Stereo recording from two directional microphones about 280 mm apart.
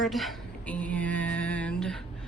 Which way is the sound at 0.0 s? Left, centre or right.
Centre.